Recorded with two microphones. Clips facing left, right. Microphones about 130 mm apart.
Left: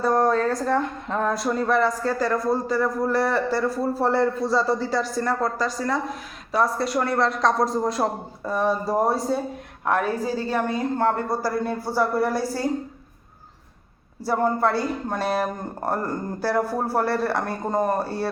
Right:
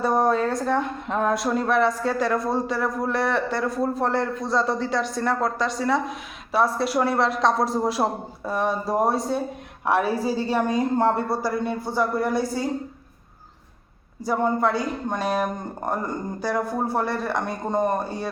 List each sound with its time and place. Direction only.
0.0 s a woman's voice: centre (ahead or behind)
11.3 s a woman's voice: centre (ahead or behind)
14.3 s a woman's voice: 5° left (ahead or behind)
15.2 s speech: 10° right (ahead or behind)
15.8 s a woman's voice: 5° left (ahead or behind)
18.0 s speech: 15° right (ahead or behind)